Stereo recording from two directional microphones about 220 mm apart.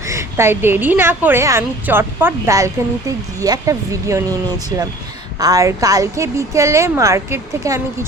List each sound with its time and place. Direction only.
0.1 s a woman's voice: 10° right (ahead or behind)
5.4 s a woman's voice: 15° right (ahead or behind)